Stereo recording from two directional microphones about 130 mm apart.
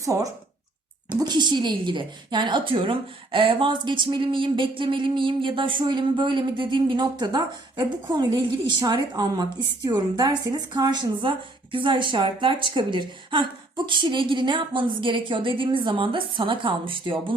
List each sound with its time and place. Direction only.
0.0 s speech: 25° right (ahead or behind)
1.2 s a woman's voice: 35° right (ahead or behind)